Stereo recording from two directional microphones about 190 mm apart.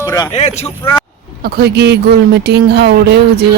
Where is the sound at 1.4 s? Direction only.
55° right (ahead or behind).